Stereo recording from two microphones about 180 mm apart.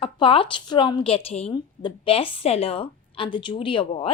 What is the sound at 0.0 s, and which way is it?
Speech, 30° left (ahead or behind).